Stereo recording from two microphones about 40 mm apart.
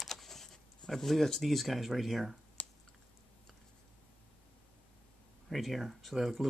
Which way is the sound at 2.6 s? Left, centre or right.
Left.